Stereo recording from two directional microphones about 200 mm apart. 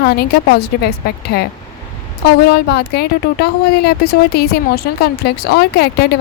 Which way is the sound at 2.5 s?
55° left (ahead or behind).